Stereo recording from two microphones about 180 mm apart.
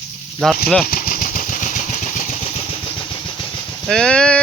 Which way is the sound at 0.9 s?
50° left (ahead or behind).